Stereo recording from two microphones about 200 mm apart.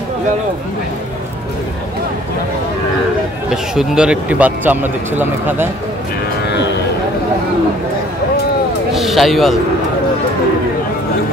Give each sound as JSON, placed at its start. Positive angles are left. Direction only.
{"t": 3.7, "sound": "speech", "side_deg": -5}
{"t": 6.4, "sound": "music", "side_deg": 60}
{"t": 8.9, "sound": "speech", "side_deg": 0}